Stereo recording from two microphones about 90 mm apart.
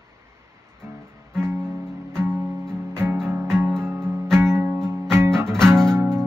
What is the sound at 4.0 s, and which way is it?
Music, 25° right (ahead or behind).